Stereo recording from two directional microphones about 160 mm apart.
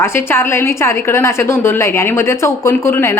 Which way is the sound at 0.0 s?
15° left (ahead or behind).